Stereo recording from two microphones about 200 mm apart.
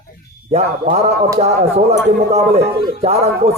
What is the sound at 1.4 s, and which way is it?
Speech, 30° right (ahead or behind).